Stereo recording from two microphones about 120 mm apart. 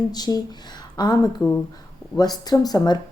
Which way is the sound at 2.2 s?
35° left (ahead or behind).